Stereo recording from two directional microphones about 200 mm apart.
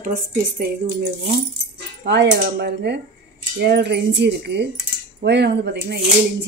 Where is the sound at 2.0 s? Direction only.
60° right (ahead or behind).